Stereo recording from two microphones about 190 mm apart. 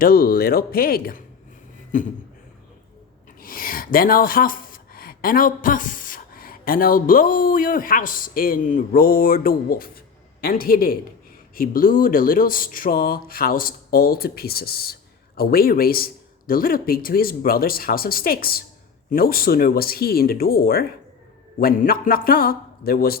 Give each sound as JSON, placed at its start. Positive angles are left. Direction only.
{"t": 0.0, "sound": "speech", "side_deg": 50}
{"t": 3.4, "sound": "speech", "side_deg": 50}